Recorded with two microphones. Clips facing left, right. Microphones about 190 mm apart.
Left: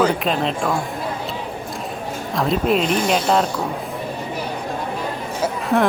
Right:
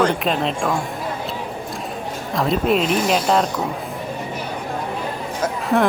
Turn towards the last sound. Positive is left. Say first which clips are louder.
# even
turn(degrees=0)  # may be behind; listen again after turning